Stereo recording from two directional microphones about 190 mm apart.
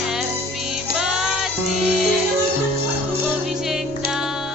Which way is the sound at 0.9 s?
Centre (ahead or behind).